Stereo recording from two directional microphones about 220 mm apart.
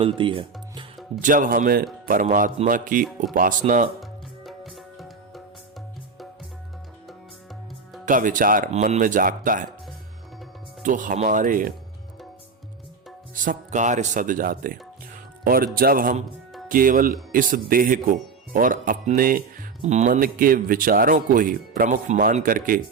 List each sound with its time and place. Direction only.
0.0 s speech: 25° right (ahead or behind)
1.2 s speech: 35° right (ahead or behind)
4.0 s music: centre (ahead or behind)
8.0 s speech: 35° right (ahead or behind)
10.8 s speech: 35° right (ahead or behind)
13.3 s speech: 35° right (ahead or behind)